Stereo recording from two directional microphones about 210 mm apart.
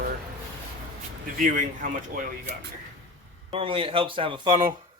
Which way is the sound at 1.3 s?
40° right (ahead or behind).